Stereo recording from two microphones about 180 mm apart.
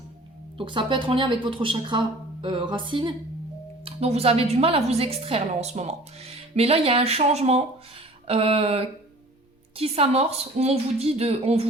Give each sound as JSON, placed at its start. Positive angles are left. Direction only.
{"t": 0.5, "sound": "a woman's voice", "side_deg": -25}